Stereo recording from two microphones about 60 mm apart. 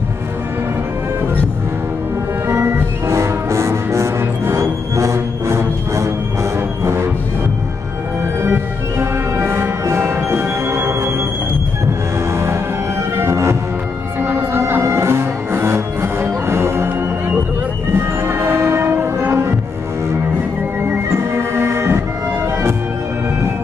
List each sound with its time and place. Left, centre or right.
2.4 s music: right
8.4 s music: right
12.3 s music: right
14.2 s music: right
14.8 s music: right
17.9 s music: right
21.3 s music: right